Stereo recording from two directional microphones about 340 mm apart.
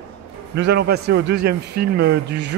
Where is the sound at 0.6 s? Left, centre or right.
Right.